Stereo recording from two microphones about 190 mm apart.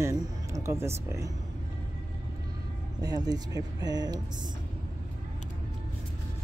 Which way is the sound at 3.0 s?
20° right (ahead or behind).